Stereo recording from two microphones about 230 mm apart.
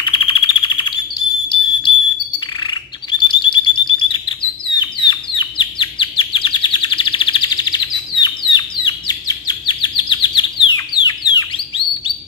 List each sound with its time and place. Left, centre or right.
0.0 s chirp: left
1.5 s smoke detector: left
3.1 s bird: centre